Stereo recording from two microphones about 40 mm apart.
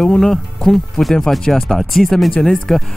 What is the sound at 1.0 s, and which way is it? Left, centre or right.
Speech, left.